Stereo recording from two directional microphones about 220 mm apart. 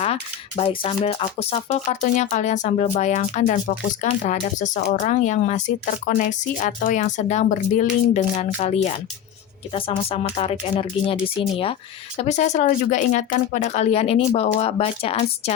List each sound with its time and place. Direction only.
0.0 s speech: 25° left (ahead or behind)